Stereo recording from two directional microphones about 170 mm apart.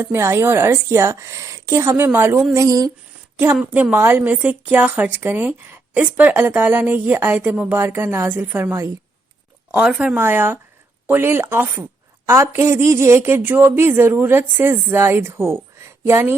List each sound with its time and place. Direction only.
0.0 s a woman's voice: 15° right (ahead or behind)